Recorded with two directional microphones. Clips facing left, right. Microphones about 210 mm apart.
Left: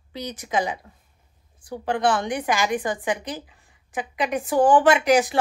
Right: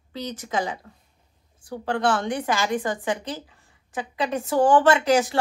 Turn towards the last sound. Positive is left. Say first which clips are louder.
# left 1 dB
turn(degrees=15)  # may be behind; listen again after turning